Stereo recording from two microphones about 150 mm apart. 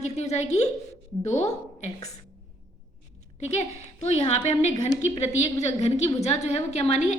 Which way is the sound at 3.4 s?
50° left (ahead or behind).